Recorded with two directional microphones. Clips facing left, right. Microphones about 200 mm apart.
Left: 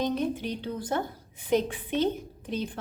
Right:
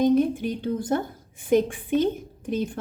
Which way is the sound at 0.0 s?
50° right (ahead or behind).